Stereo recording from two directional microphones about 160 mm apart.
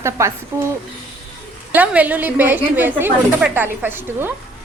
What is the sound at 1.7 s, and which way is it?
A woman's voice, 10° right (ahead or behind).